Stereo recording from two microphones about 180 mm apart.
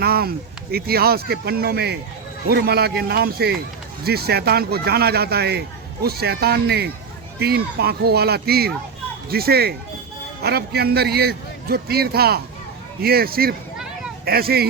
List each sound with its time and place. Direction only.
0.0 s speech: 60° right (ahead or behind)